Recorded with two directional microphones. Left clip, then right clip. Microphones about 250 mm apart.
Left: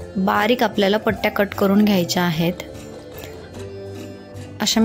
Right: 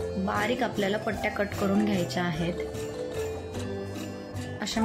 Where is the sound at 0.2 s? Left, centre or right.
Left.